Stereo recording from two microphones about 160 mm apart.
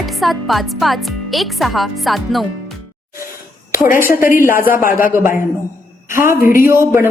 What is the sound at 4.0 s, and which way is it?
A woman's voice, 15° right (ahead or behind).